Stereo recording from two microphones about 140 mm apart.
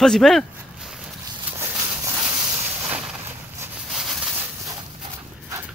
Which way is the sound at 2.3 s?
15° right (ahead or behind).